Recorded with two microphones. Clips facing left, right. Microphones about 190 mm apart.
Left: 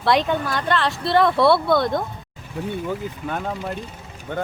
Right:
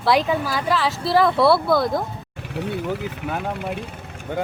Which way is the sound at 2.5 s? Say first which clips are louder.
Right 1 dB; 75° right (ahead or behind).